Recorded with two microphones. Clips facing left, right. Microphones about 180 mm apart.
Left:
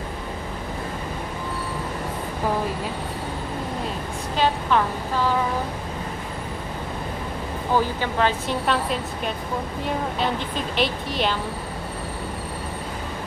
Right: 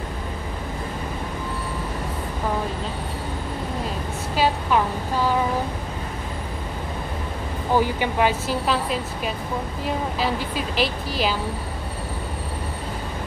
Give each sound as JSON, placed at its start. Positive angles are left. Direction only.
{"t": 7.7, "sound": "a woman's voice", "side_deg": -15}